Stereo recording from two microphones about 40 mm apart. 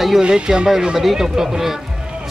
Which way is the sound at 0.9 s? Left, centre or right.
Centre.